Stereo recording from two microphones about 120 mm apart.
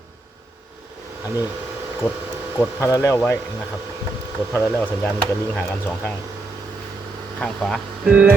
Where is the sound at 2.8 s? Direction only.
25° left (ahead or behind).